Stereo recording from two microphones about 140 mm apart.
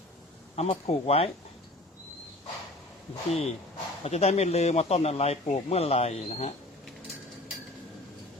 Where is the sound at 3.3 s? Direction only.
50° left (ahead or behind).